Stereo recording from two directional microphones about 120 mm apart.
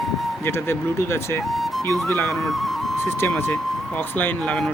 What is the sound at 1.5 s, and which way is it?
Music, centre (ahead or behind).